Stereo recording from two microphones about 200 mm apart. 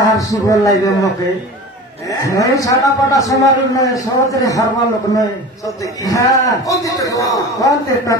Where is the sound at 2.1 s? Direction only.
15° left (ahead or behind).